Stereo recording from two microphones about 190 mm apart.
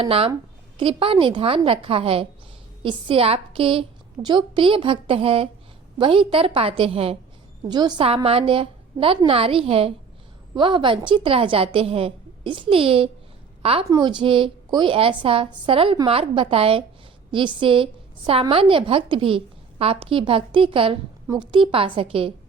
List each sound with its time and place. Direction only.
0.0 s a woman's voice: 30° right (ahead or behind)